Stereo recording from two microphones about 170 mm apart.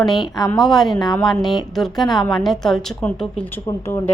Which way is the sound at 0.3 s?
25° left (ahead or behind).